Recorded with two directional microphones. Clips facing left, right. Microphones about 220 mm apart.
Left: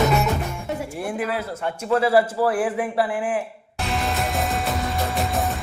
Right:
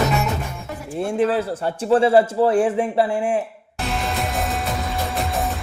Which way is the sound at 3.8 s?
Centre (ahead or behind).